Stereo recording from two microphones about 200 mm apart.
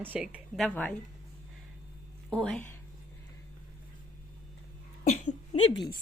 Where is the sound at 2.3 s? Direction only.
5° left (ahead or behind).